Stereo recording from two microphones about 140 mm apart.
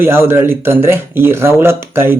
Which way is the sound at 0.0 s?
15° right (ahead or behind).